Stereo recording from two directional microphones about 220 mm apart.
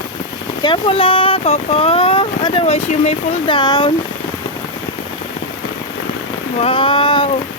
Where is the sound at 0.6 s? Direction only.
25° left (ahead or behind).